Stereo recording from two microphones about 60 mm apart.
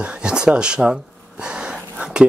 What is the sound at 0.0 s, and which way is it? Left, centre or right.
Speech, centre.